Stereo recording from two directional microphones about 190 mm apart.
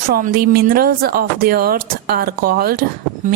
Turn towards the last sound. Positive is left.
turn(degrees=-50)  # may be behind; listen again after turning